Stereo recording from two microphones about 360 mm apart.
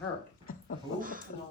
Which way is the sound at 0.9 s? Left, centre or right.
Right.